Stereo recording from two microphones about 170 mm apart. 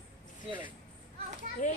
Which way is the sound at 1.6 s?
45° left (ahead or behind).